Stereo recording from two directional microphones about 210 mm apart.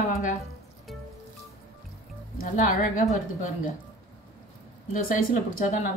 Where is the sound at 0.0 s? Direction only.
35° left (ahead or behind).